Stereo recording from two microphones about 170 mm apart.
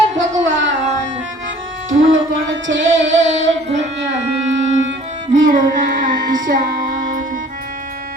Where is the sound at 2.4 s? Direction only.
90° right.